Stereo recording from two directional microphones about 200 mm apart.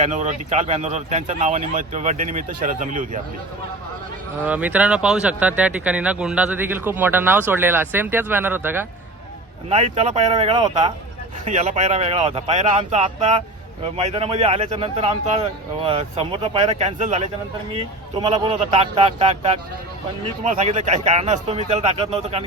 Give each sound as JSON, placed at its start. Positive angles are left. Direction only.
{"t": 0.0, "sound": "a man's voice", "side_deg": -35}
{"t": 4.4, "sound": "speech", "side_deg": -10}
{"t": 9.6, "sound": "a man's voice", "side_deg": -30}
{"t": 10.2, "sound": "a man's voice", "side_deg": -25}